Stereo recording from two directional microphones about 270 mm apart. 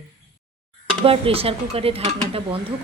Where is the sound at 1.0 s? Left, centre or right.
Right.